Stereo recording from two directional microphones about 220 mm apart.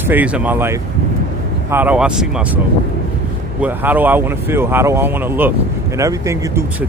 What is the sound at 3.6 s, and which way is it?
Speech, 10° right (ahead or behind).